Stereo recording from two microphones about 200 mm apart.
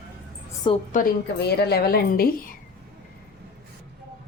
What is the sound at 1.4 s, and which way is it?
A woman's voice, 55° left (ahead or behind).